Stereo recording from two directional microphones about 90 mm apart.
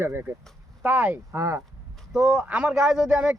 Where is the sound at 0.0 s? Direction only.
25° right (ahead or behind).